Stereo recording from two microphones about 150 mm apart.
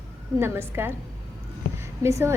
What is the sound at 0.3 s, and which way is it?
Speech, 15° right (ahead or behind).